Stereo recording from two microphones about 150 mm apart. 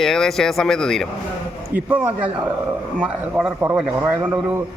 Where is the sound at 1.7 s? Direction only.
10° right (ahead or behind).